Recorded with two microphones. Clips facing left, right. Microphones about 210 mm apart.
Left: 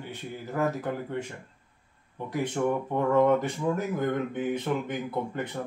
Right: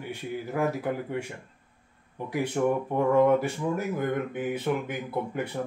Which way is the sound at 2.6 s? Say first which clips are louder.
Right 2 dB; 5° right (ahead or behind).